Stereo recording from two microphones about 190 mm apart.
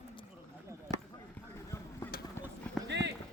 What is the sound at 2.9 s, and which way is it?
Run, 65° right (ahead or behind).